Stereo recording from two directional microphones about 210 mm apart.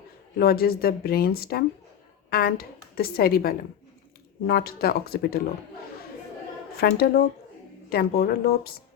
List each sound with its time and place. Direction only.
0.3 s a woman's voice: 45° left (ahead or behind)
6.7 s a woman's voice: 45° left (ahead or behind)